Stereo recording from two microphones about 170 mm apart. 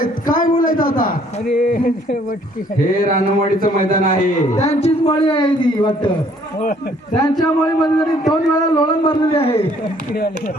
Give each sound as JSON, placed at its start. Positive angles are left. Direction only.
{"t": 0.0, "sound": "a sound", "side_deg": 55}
{"t": 1.5, "sound": "a man's voice", "side_deg": 55}
{"t": 4.6, "sound": "a man's voice", "side_deg": 40}
{"t": 7.2, "sound": "a man's voice", "side_deg": 25}
{"t": 10.1, "sound": "speech", "side_deg": 65}